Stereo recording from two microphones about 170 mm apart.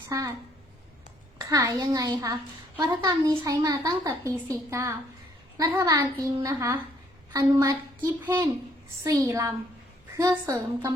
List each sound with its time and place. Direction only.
0.1 s a woman's voice: 20° right (ahead or behind)
1.5 s a woman's voice: 20° right (ahead or behind)